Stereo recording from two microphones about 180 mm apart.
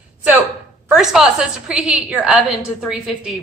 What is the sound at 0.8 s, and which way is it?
A woman's voice, centre (ahead or behind).